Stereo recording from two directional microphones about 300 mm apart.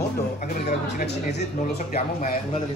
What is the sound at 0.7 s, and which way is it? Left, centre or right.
Speech, left.